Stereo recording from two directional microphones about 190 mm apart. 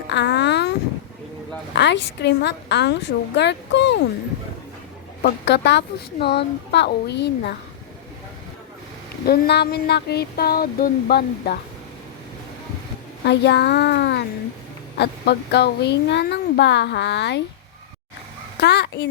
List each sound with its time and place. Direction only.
0.1 s a sound: 65° left (ahead or behind)
1.7 s speech: 65° left (ahead or behind)
5.2 s speech: 65° left (ahead or behind)
9.2 s speech: 55° left (ahead or behind)
13.2 s speech: 65° left (ahead or behind)
18.6 s speech: 60° left (ahead or behind)